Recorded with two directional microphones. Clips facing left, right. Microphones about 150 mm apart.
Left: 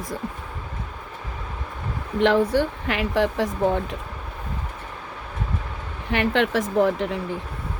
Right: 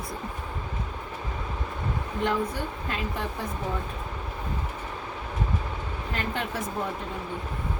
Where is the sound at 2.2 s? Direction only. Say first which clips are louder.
Left 10 dB; 85° left.